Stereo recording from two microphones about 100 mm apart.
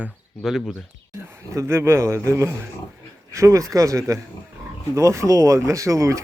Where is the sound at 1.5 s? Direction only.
25° right (ahead or behind).